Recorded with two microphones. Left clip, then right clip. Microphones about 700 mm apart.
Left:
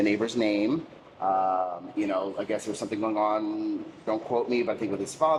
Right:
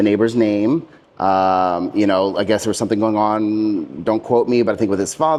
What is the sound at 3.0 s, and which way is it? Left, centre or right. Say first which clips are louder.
Speech: right 7 dB; right.